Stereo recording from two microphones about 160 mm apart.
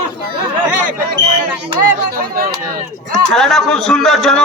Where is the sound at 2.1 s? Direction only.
60° right (ahead or behind).